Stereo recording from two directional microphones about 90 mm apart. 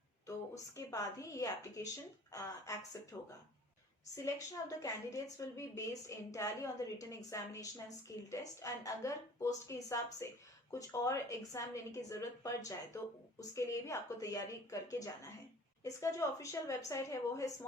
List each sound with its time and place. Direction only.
0.9 s a woman's voice: 40° left (ahead or behind)